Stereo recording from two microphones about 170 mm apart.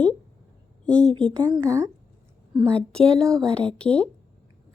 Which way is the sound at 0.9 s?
5° left (ahead or behind).